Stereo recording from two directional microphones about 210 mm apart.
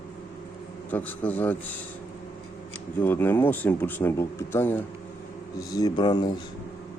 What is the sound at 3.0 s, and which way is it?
Speech, 10° left (ahead or behind).